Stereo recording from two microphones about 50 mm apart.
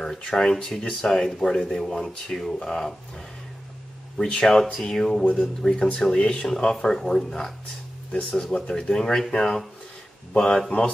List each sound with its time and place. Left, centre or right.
0.0 s speech: centre
4.2 s speech: centre